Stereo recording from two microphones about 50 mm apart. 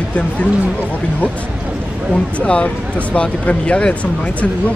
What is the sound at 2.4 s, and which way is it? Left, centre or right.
Speech, left.